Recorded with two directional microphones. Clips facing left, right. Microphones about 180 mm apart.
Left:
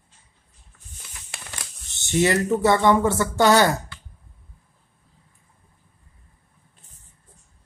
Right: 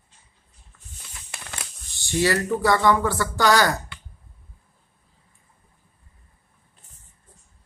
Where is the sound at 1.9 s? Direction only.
20° left (ahead or behind).